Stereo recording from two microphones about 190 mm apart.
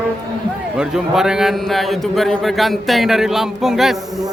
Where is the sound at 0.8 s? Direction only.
Centre (ahead or behind).